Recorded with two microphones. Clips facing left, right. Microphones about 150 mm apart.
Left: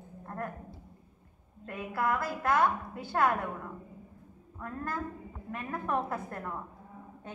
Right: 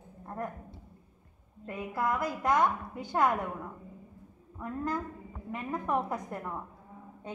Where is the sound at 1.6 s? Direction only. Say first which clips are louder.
Even; 15° right (ahead or behind).